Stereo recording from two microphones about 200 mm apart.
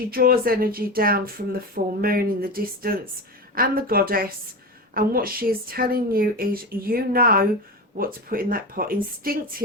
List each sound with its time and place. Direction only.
0.1 s speech: 45° right (ahead or behind)